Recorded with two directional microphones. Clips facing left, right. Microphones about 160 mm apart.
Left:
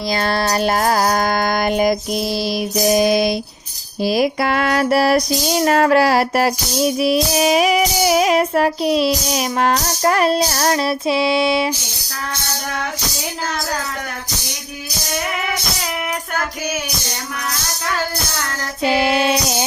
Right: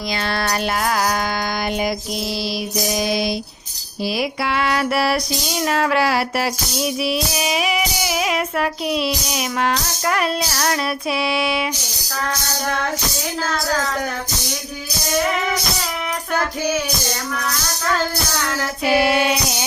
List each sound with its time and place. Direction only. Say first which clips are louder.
0.1 s music: left 4 dB; 40° left (ahead or behind)
2.7 s mantra: left 7 dB; 50° left (ahead or behind)
4.0 s music: left 5 dB; 45° left (ahead or behind)
18.8 s music: left 1 dB; 25° left (ahead or behind)